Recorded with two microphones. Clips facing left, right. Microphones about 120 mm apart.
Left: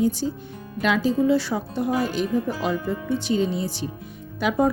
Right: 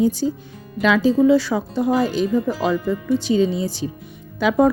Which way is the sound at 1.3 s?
90° right.